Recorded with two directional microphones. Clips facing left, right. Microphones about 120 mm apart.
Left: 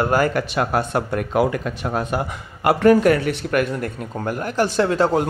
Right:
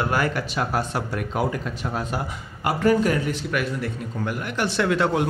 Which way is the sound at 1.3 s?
65° left (ahead or behind).